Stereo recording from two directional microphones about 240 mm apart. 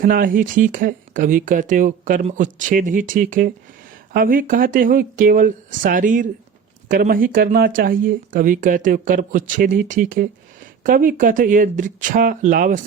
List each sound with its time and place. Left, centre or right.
0.0 s speech: right